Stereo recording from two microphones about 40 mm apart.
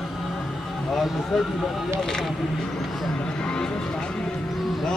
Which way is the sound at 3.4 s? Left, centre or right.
Left.